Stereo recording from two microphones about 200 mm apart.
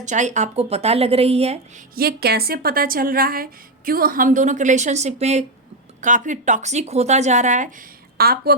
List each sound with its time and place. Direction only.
0.0 s speech: 35° right (ahead or behind)
2.0 s a woman's voice: 50° right (ahead or behind)